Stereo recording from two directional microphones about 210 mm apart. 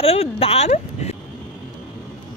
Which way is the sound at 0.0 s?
30° left (ahead or behind).